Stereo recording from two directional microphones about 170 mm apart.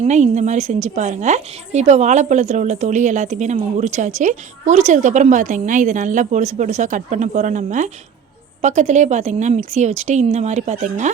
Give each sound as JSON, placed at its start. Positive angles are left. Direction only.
{"t": 0.0, "sound": "a woman's voice", "side_deg": -45}